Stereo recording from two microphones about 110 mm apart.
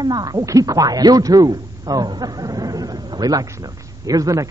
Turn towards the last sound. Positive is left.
turn(degrees=-30)  # may be behind; listen again after turning